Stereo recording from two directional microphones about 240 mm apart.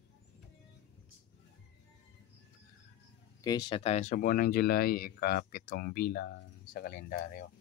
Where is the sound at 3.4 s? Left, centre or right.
Centre; by 7.5 s left.